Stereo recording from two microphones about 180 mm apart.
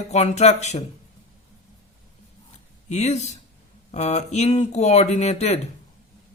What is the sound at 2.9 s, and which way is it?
Speech, 40° left (ahead or behind).